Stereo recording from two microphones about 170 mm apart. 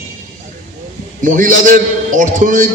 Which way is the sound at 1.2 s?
50° right (ahead or behind).